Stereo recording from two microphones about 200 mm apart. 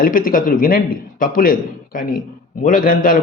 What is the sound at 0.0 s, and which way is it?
A man's voice, 45° left (ahead or behind).